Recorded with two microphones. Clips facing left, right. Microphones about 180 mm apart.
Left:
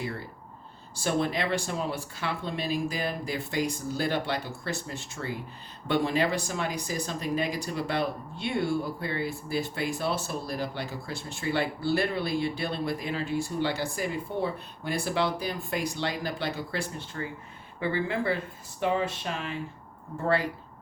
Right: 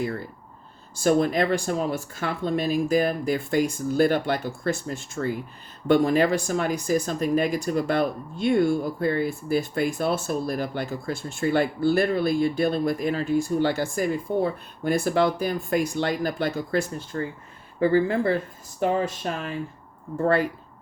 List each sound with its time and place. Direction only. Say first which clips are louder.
0.9 s speech: right 7 dB; 45° right (ahead or behind)